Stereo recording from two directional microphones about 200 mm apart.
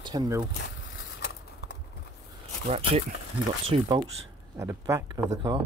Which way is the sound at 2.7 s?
30° right (ahead or behind).